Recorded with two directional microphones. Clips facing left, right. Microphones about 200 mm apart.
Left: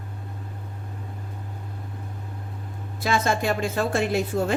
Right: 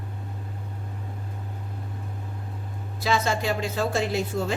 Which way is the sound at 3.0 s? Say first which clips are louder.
Left 2 dB; 50° left (ahead or behind).